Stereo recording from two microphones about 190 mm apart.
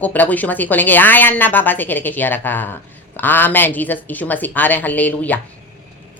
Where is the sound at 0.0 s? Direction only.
10° left (ahead or behind).